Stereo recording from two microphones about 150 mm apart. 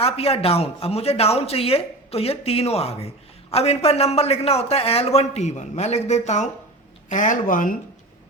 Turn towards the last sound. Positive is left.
turn(degrees=60)  # may be behind; listen again after turning